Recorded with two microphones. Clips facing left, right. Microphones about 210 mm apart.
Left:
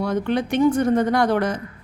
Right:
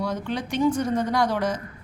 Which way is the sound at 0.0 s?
60° left (ahead or behind).